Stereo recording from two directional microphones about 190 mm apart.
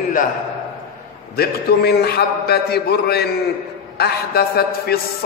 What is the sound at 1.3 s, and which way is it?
A man's voice, 55° left (ahead or behind).